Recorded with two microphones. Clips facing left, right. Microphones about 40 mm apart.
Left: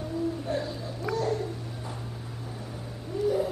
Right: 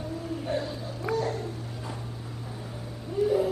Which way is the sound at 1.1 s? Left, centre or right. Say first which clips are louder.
Even; right.